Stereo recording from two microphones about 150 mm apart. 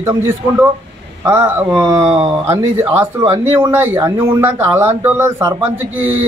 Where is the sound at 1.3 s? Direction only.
15° right (ahead or behind).